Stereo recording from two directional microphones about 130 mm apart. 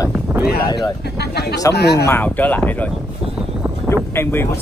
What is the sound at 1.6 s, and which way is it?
A woman's voice, 20° left (ahead or behind).